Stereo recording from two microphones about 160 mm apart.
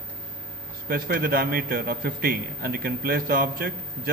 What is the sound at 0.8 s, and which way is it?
A man's voice, 65° right (ahead or behind).